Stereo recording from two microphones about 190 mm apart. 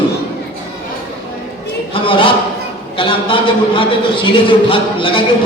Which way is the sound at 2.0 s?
25° left (ahead or behind).